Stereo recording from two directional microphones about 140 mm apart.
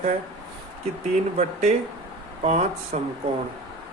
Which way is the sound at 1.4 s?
55° right (ahead or behind).